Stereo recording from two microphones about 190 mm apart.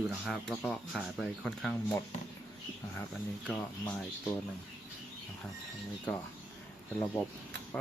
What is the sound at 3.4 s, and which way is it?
Speech, 5° left (ahead or behind).